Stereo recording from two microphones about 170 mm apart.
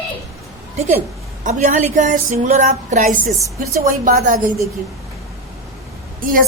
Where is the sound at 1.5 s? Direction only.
45° right (ahead or behind).